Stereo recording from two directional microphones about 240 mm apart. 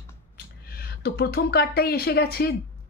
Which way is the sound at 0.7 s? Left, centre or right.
Left.